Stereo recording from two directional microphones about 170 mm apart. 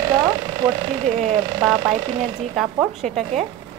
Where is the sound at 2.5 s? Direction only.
Centre (ahead or behind).